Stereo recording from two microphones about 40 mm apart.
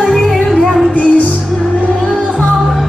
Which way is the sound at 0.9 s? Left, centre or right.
Left.